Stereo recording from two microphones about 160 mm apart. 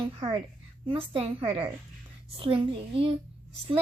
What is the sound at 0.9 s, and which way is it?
A woman's voice, 35° right (ahead or behind).